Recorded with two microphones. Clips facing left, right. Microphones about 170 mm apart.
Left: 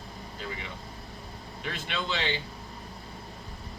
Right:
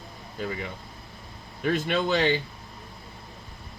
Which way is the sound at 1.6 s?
45° right (ahead or behind).